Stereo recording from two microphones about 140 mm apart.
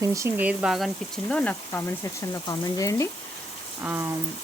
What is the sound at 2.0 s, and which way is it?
Speech, 20° left (ahead or behind).